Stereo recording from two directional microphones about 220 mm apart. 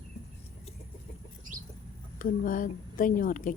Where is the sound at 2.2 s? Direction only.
40° left (ahead or behind).